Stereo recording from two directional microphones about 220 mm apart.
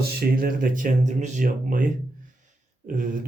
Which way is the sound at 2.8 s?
40° right (ahead or behind).